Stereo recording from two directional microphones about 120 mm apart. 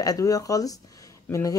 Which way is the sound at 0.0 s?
30° left (ahead or behind).